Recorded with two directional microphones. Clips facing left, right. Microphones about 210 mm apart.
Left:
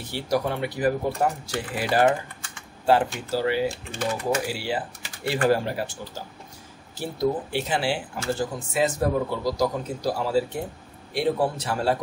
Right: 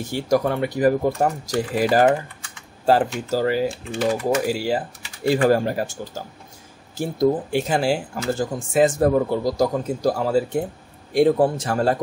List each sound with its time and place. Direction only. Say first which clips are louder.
0.0 s speech: right 5 dB; 45° right (ahead or behind)